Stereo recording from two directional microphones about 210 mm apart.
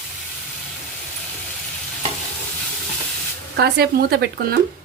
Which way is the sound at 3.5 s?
50° right (ahead or behind).